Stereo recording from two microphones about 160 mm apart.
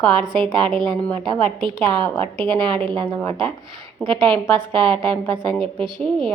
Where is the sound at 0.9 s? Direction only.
5° left (ahead or behind).